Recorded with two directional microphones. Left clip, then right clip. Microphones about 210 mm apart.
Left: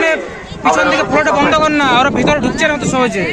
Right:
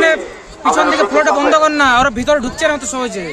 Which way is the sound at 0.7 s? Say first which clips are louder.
Left 1 dB; 10° right (ahead or behind).